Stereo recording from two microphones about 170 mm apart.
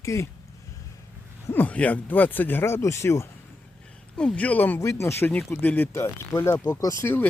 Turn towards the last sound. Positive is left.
turn(degrees=15)  # may be behind; listen again after turning